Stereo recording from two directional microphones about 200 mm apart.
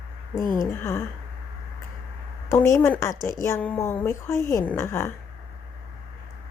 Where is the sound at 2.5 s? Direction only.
15° left (ahead or behind).